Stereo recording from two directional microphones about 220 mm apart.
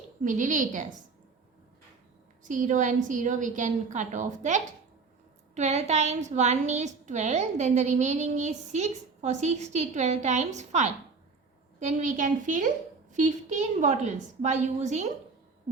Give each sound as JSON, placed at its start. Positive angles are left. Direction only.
{"t": 0.3, "sound": "a woman's voice", "side_deg": -35}
{"t": 2.4, "sound": "a woman's voice", "side_deg": -35}